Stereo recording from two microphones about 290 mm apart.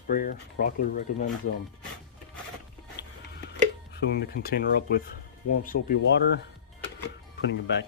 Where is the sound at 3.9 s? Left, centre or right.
Left.